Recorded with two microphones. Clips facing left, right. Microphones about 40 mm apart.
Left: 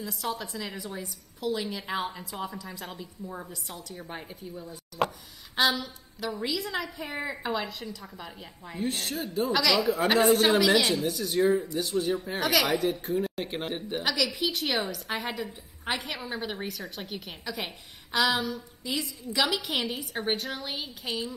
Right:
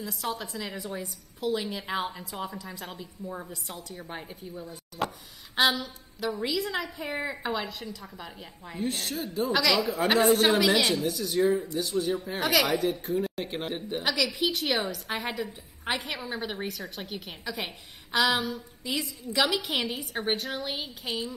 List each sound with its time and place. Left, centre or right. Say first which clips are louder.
0.0 s a woman's voice: even; centre
11.3 s a man's voice: left 1 dB; left
11.7 s a woman's voice: even; centre
14.0 s a woman's voice: right 1 dB; centre